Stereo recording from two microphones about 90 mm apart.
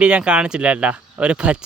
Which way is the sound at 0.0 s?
10° right (ahead or behind).